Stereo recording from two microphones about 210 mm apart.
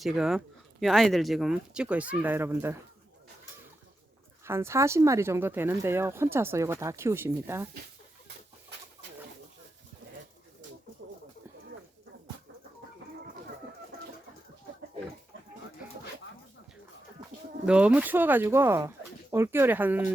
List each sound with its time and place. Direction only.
0.0 s speech: centre (ahead or behind)
4.4 s speech: 10° right (ahead or behind)
17.2 s a sound: 20° right (ahead or behind)
17.7 s speech: 5° right (ahead or behind)